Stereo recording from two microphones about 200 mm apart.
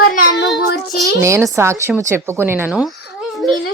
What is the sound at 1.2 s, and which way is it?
Speech, 15° right (ahead or behind).